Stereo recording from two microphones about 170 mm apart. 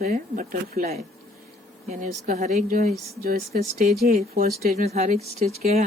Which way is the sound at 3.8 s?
40° right (ahead or behind).